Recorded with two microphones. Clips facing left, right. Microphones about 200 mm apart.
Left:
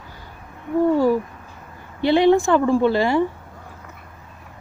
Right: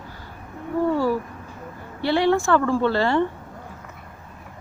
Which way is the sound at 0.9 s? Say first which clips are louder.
Left 4 dB; 15° left (ahead or behind).